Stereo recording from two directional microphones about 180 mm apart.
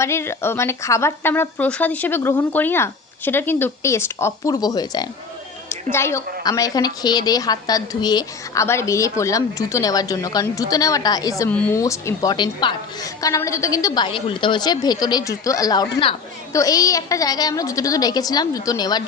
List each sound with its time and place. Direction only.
0.0 s a woman's voice: 15° left (ahead or behind)
11.5 s speech: 10° left (ahead or behind)
11.8 s a woman's voice: 20° left (ahead or behind)